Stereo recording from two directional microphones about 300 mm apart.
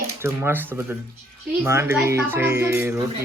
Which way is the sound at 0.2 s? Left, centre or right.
Centre.